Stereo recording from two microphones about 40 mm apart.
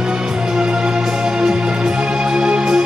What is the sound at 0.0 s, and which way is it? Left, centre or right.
Music, centre.